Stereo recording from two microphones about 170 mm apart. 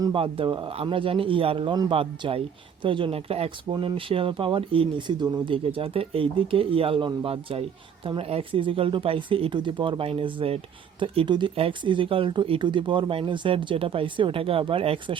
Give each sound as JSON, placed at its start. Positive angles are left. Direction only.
{"t": 0.0, "sound": "speech", "side_deg": -30}